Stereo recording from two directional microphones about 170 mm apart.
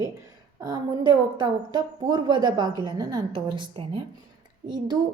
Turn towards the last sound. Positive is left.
turn(degrees=-25)  # may be behind; listen again after turning